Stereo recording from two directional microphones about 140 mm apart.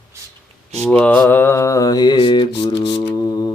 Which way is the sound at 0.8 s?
10° left (ahead or behind).